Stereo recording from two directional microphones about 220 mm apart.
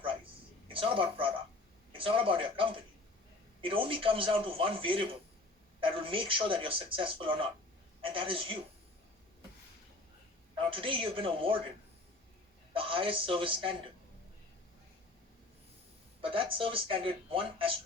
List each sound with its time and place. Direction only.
0.7 s a man's voice: 25° right (ahead or behind)
10.7 s a woman's voice: 25° right (ahead or behind)
12.7 s a woman's voice: 25° right (ahead or behind)
16.2 s a woman's voice: 25° right (ahead or behind)